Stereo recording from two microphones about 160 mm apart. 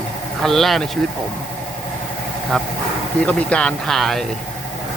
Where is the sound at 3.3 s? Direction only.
5° left (ahead or behind).